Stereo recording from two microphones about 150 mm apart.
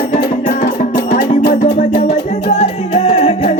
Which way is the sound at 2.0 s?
45° left (ahead or behind).